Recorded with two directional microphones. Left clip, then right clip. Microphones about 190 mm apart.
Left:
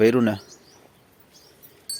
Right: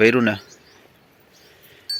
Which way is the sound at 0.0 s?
15° left (ahead or behind).